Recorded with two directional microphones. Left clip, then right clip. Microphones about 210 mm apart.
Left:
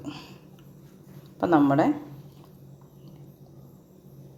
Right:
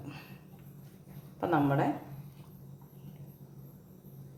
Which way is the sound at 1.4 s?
40° left (ahead or behind).